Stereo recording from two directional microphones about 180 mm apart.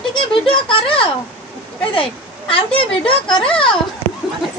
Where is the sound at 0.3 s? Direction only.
30° left (ahead or behind).